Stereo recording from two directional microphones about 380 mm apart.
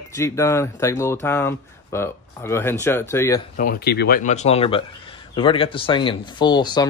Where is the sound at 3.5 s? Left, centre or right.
Left.